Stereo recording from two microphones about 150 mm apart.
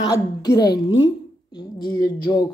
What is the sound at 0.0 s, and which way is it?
A woman's voice, 25° left (ahead or behind).